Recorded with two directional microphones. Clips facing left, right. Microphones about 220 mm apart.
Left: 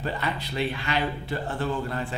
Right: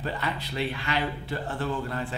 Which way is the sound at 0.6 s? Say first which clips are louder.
Left 2 dB; 20° left (ahead or behind).